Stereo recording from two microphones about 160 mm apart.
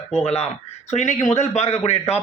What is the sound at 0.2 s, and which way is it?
A man's voice, 40° left (ahead or behind).